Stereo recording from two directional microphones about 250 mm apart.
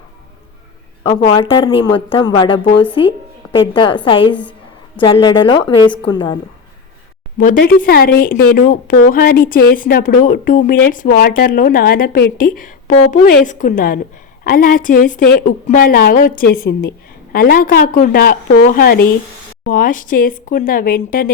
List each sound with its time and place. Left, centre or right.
1.4 s a woman's voice: centre
7.3 s speech: left